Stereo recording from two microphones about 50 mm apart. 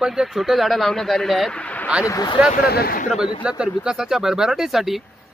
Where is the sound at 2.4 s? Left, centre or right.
Right.